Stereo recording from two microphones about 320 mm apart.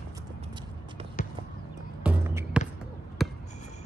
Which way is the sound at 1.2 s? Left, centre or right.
Left.